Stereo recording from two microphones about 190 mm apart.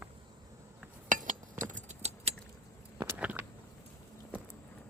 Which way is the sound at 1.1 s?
45° right (ahead or behind).